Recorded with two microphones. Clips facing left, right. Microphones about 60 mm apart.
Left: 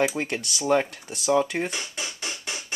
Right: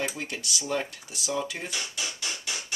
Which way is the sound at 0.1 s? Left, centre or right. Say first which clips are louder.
Left 5 dB; left.